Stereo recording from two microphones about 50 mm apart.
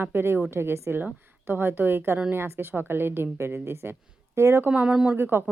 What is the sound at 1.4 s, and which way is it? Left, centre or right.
Speech, right.